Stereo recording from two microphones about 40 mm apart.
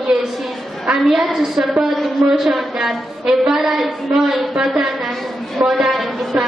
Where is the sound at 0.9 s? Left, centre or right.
Centre.